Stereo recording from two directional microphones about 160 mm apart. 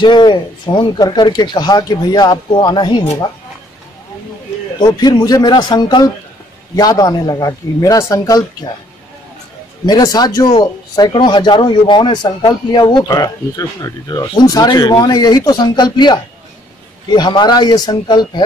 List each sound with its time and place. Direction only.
0.0 s speech: 30° left (ahead or behind)
4.7 s speech: 25° left (ahead or behind)
9.8 s speech: 25° left (ahead or behind)